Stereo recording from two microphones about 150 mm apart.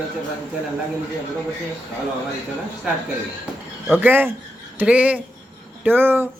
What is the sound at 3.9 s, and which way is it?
Speech, 10° right (ahead or behind).